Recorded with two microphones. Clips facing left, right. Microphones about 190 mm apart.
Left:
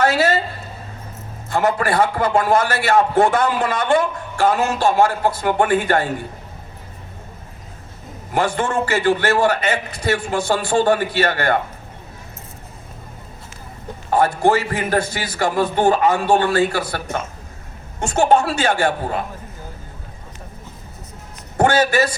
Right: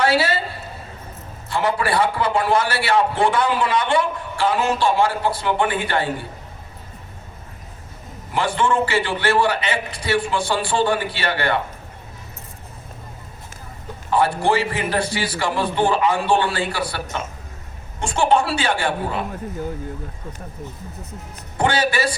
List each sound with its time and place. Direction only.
0.0 s a woman's voice: 45° left (ahead or behind)
1.5 s a man's voice: 45° left (ahead or behind)
8.3 s a man's voice: 45° left (ahead or behind)
14.1 s a man's voice: 45° left (ahead or behind)
21.6 s a man's voice: 45° left (ahead or behind)